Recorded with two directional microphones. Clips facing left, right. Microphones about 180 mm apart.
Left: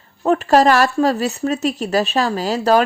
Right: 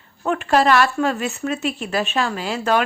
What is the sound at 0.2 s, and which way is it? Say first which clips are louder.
Speech: left 5 dB; 35° left (ahead or behind).